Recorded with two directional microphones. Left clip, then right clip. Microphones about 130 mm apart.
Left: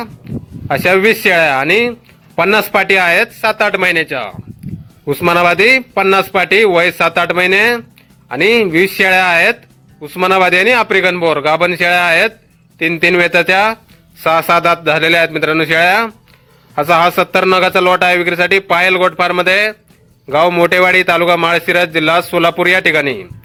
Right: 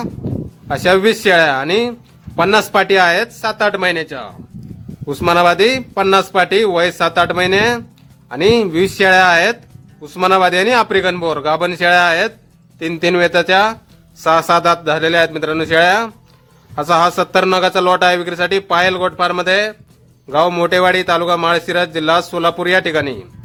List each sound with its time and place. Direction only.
0.7 s a man's voice: 10° left (ahead or behind)